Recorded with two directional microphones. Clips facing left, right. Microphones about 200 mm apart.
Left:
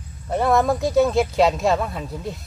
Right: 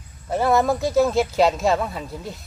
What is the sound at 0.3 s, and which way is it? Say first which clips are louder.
Speech: even; centre (ahead or behind).